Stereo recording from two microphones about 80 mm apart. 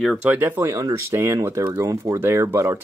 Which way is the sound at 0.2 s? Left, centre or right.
Right.